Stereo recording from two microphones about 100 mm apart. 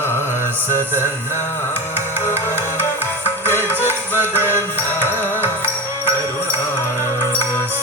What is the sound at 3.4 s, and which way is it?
Music, 20° left (ahead or behind).